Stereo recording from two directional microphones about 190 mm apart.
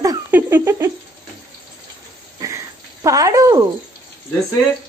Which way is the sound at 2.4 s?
15° right (ahead or behind).